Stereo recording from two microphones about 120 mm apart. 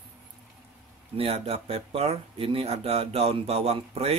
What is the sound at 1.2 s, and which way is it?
Speech, 55° right (ahead or behind).